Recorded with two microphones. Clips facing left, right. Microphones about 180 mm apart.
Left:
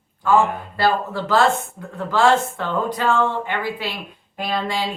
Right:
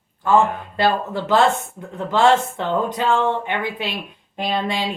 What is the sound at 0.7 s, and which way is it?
Speech, 20° right (ahead or behind).